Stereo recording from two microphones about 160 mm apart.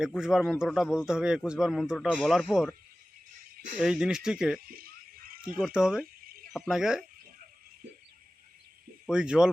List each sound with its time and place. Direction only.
0.0 s a man's voice: 5° right (ahead or behind)
3.8 s a man's voice: 5° right (ahead or behind)
4.6 s a sound: 65° right (ahead or behind)
5.5 s a man's voice: 5° right (ahead or behind)
6.2 s a sound: 65° right (ahead or behind)
6.5 s a man's voice: centre (ahead or behind)
9.0 s a man's voice: 5° right (ahead or behind)